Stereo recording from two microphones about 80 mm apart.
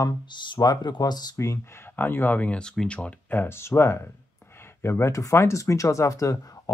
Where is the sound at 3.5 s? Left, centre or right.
Left.